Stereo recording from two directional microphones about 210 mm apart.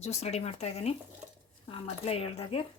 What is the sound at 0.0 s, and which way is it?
Speech, 30° left (ahead or behind).